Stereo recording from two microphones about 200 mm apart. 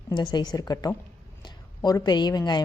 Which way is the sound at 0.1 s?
20° left (ahead or behind).